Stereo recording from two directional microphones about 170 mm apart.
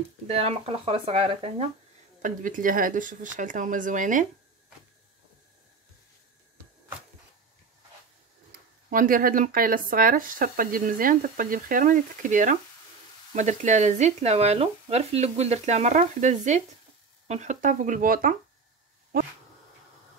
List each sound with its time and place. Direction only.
0.3 s speech: 35° right (ahead or behind)
2.2 s speech: 50° right (ahead or behind)
8.5 s speech: 55° right (ahead or behind)